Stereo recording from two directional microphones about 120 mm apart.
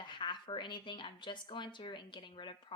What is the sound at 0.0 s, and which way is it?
Speech, 40° left (ahead or behind).